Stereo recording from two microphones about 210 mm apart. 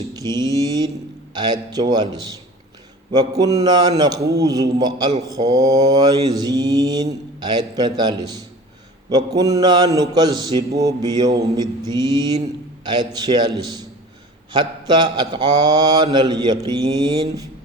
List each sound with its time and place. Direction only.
0.1 s mantra: 20° right (ahead or behind)
3.1 s a man's voice: 20° right (ahead or behind)
5.3 s mantra: 15° right (ahead or behind)
12.4 s a man's voice: 20° right (ahead or behind)
14.5 s mantra: 20° right (ahead or behind)